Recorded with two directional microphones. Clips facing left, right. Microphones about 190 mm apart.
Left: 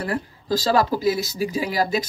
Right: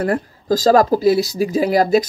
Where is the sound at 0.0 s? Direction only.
45° right (ahead or behind).